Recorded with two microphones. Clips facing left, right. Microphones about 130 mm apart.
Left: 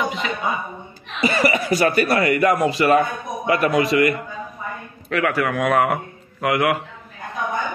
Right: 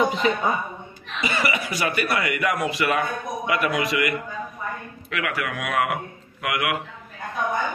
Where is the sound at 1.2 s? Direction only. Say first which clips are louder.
Left 6 dB; 40° left (ahead or behind).